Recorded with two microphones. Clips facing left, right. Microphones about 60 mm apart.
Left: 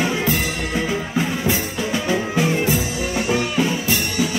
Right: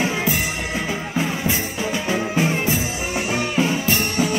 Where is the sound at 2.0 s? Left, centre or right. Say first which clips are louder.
Left 1 dB; centre.